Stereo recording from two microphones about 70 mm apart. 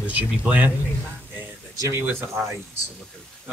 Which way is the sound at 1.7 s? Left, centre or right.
Right.